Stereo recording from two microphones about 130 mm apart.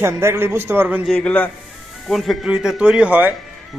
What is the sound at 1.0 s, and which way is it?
A man's voice, 10° left (ahead or behind).